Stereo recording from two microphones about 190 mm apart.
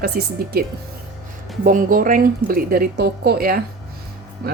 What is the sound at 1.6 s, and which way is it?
A woman's voice, 45° right (ahead or behind).